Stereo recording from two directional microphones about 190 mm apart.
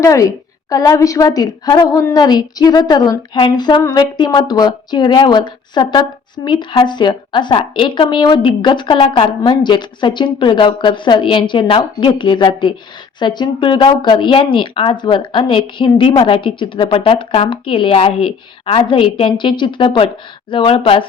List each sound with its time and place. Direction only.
0.0 s speech: 15° left (ahead or behind)